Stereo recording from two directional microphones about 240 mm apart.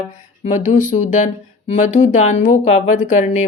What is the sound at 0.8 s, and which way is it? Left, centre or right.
Speech, left.